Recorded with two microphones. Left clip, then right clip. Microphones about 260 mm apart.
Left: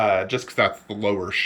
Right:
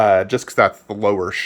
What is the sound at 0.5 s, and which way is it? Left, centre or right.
Speech, centre.